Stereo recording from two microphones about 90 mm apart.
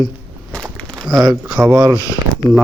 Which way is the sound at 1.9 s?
40° left (ahead or behind).